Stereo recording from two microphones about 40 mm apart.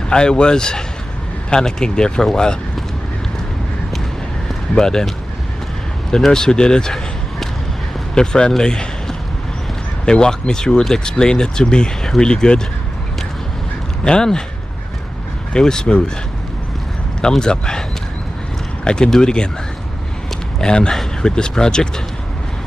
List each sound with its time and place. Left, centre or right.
0.1 s speech: left
4.7 s speech: centre
6.1 s speech: centre
8.1 s speech: centre
14.0 s speech: centre
15.5 s speech: centre
17.4 s speech: centre
19.0 s speech: centre
20.6 s speech: left